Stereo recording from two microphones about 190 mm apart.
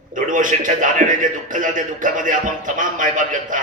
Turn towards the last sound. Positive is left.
turn(degrees=-45)  # may be behind; listen again after turning